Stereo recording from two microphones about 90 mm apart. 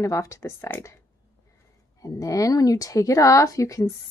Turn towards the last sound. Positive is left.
turn(degrees=35)  # may be behind; listen again after turning